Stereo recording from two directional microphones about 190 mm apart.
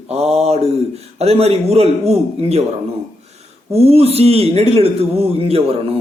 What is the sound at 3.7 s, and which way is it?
A man's voice, 30° right (ahead or behind).